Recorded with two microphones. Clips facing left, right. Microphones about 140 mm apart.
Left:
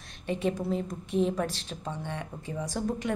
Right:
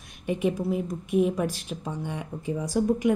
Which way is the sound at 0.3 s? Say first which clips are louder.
Right 3 dB; 10° right (ahead or behind).